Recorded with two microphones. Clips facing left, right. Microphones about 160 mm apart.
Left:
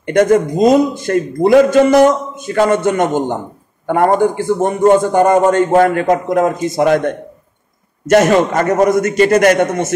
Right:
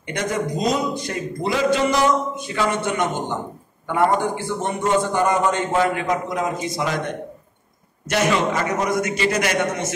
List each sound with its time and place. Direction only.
0.0 s a man's voice: 55° left (ahead or behind)